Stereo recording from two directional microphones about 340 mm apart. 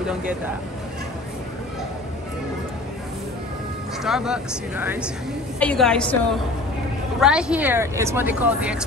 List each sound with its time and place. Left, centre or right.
0.0 s speech: centre
4.0 s speech: centre
7.2 s speech: centre